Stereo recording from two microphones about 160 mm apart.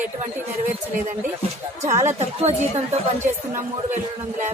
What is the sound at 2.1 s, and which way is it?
Speech, 45° right (ahead or behind).